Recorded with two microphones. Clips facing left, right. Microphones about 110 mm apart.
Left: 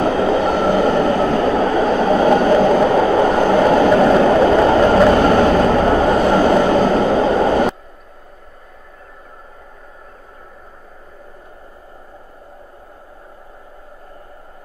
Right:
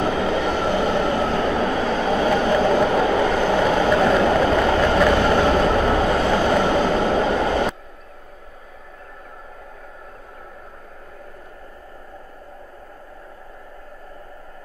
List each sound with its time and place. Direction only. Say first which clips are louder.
0.0 s train: left 5 dB; 40° left (ahead or behind)